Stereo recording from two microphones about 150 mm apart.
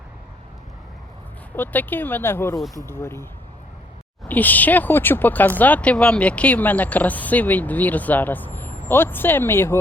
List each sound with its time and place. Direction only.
1.5 s speech: 10° left (ahead or behind)
4.3 s speech: 10° left (ahead or behind)